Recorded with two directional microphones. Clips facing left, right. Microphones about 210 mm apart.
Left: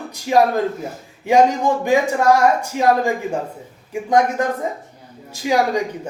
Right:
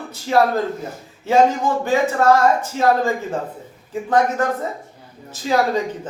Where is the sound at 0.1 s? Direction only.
15° left (ahead or behind).